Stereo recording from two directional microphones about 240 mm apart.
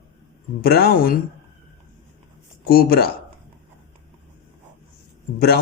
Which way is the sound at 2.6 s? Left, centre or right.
Left.